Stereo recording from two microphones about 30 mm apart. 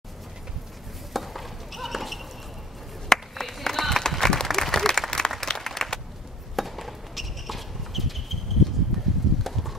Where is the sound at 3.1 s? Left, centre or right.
Centre.